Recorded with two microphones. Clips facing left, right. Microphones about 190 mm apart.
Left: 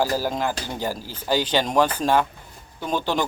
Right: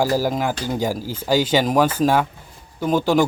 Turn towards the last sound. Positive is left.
turn(degrees=-10)  # may be behind; listen again after turning